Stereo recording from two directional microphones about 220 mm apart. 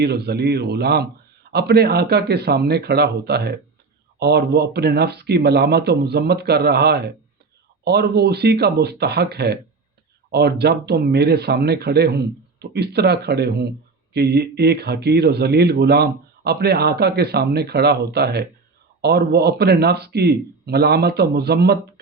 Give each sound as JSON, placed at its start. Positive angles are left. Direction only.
{"t": 0.0, "sound": "speech", "side_deg": -50}